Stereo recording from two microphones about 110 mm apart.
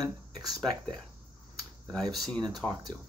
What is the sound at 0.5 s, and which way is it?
Speech, centre (ahead or behind).